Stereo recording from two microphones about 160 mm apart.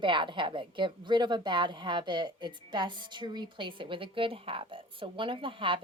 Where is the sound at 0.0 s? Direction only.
30° right (ahead or behind).